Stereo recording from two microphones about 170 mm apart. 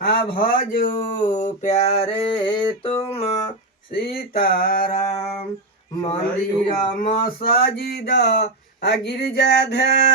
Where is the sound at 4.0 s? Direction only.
60° left (ahead or behind).